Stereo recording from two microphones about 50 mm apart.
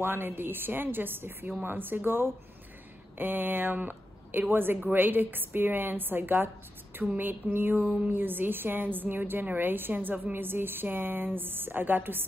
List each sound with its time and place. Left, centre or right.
0.0 s a woman's voice: right
7.2 s a sound: right
7.8 s a woman's voice: right